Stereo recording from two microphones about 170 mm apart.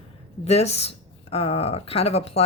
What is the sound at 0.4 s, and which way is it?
Speech, 40° left (ahead or behind).